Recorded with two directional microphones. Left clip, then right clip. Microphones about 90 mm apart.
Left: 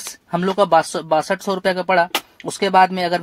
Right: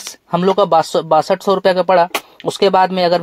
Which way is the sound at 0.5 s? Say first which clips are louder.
Right 3 dB; 15° right (ahead or behind).